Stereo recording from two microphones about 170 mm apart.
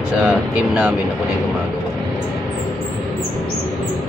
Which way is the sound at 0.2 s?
10° right (ahead or behind).